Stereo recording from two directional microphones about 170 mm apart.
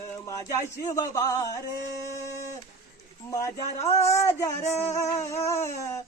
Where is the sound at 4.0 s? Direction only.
15° left (ahead or behind).